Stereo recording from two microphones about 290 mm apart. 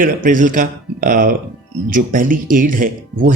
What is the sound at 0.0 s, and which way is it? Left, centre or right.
Speech, right.